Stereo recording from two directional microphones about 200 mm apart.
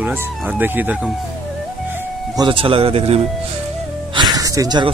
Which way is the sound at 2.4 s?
25° right (ahead or behind).